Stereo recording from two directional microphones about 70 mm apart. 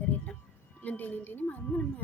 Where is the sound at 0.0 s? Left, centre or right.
Left.